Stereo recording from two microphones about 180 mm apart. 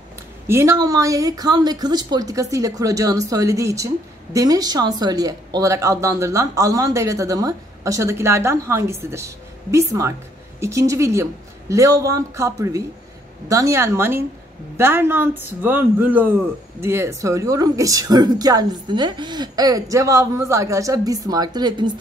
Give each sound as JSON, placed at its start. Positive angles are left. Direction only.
{"t": 0.5, "sound": "a woman's voice", "side_deg": -15}